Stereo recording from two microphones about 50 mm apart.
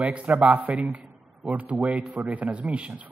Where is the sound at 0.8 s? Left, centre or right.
Right.